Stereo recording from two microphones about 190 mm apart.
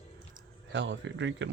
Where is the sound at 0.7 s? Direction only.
70° right (ahead or behind).